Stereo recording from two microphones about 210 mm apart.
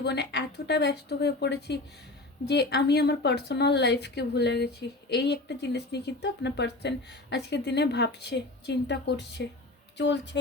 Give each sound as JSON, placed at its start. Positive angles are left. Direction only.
{"t": 0.0, "sound": "speech", "side_deg": 55}